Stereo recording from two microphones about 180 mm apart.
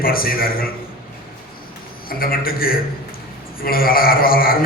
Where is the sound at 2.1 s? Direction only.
55° left (ahead or behind).